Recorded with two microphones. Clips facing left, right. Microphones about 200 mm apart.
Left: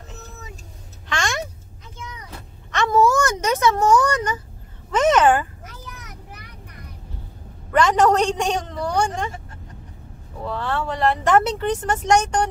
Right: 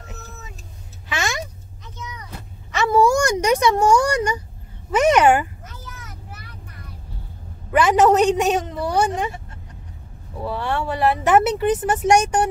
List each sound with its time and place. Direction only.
1.0 s a sound: 5° right (ahead or behind)
2.7 s a sound: 10° right (ahead or behind)
4.9 s speech: 10° right (ahead or behind)
5.7 s vehicle: 15° left (ahead or behind)
7.7 s a woman's voice: 5° right (ahead or behind)
10.4 s speech: 10° right (ahead or behind)